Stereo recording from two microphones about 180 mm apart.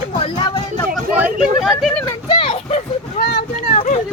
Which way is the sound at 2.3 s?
30° left (ahead or behind).